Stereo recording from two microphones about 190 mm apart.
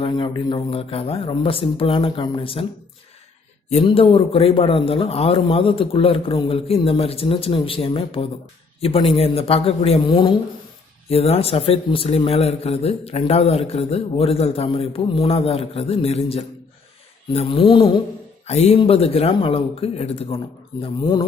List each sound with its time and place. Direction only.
0.0 s a man's voice: 25° left (ahead or behind)
3.7 s a man's voice: 35° left (ahead or behind)